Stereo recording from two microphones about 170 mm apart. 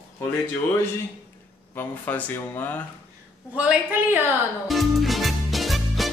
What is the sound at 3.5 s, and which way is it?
Speech, 5° right (ahead or behind).